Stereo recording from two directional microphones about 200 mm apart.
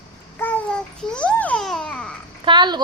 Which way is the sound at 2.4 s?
20° right (ahead or behind).